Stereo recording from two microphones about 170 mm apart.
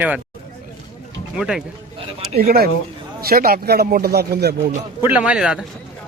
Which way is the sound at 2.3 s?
60° right (ahead or behind).